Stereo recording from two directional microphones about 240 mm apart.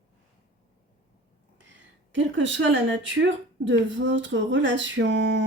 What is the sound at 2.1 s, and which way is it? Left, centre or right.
A woman's voice, right.